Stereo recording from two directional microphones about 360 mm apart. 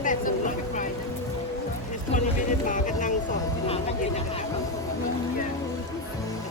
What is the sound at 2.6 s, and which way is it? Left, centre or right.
Music, left.